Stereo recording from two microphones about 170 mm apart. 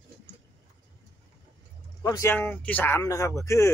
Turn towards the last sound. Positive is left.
turn(degrees=15)  # may be behind; listen again after turning